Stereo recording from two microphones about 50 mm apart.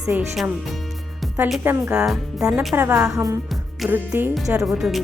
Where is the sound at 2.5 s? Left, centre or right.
Centre.